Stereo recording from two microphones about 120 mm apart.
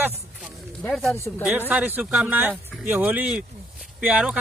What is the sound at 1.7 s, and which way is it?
Speech, 10° right (ahead or behind).